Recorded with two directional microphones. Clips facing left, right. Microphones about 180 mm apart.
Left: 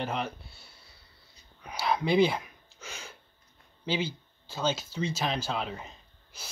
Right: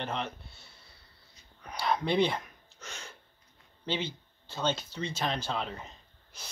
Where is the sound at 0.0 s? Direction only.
5° left (ahead or behind).